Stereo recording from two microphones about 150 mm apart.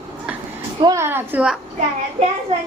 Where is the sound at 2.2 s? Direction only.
45° right (ahead or behind).